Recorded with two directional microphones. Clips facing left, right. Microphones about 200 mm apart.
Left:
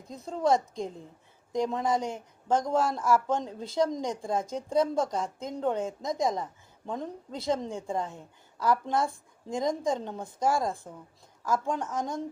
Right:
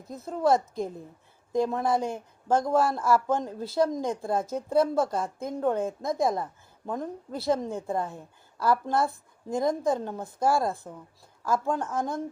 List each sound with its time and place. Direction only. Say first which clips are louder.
0.2 s speech: right 2 dB; 5° right (ahead or behind)
3.9 s speech: right 3 dB; 55° right (ahead or behind)
4.2 s a woman's voice: right 2 dB; 5° right (ahead or behind)